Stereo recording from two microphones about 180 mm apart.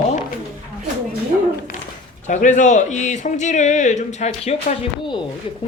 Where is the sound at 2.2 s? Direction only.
45° left (ahead or behind).